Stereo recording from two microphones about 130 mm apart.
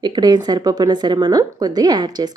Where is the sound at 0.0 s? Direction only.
30° right (ahead or behind).